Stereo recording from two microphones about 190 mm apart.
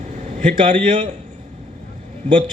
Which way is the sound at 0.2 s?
40° right (ahead or behind).